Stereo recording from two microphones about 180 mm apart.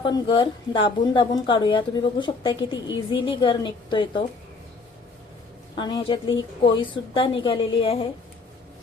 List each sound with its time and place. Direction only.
0.0 s a woman's voice: 30° left (ahead or behind)
5.7 s a woman's voice: 25° left (ahead or behind)